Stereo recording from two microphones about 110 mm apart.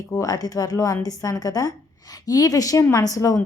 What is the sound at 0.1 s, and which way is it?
A woman's voice, 35° left (ahead or behind).